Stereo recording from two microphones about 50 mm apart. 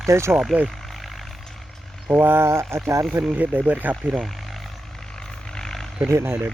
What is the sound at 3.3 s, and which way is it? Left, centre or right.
Speech, right.